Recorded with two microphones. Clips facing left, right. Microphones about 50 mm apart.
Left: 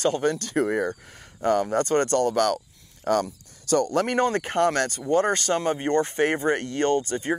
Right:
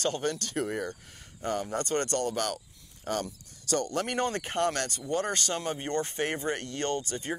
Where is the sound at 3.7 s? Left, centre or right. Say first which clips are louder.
Left 8 dB; left.